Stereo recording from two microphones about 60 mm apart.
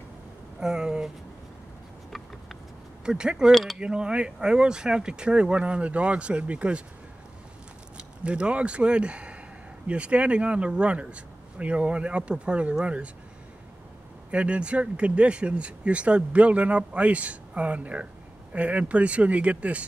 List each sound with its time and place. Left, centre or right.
0.6 s speech: centre
3.1 s speech: centre
8.0 s speech: centre
14.3 s speech: centre